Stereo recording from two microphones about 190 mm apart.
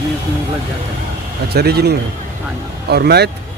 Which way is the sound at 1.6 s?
55° right (ahead or behind).